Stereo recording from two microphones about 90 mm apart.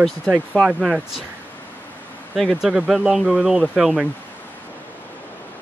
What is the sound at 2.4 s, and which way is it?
Speech, centre (ahead or behind).